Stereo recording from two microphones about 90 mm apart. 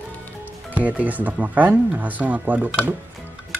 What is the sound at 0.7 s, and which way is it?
Speech, 20° right (ahead or behind).